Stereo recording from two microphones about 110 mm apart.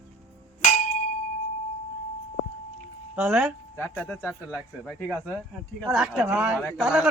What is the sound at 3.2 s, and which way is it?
Speech, 10° right (ahead or behind).